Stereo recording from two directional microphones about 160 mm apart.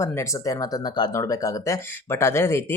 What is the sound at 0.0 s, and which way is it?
Speech, 20° left (ahead or behind).